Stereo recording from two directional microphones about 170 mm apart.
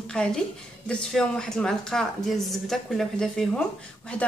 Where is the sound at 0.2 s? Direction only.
5° left (ahead or behind).